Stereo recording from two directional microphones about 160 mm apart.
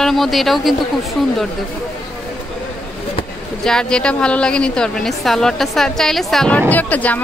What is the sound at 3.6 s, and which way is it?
A woman's voice, 5° left (ahead or behind).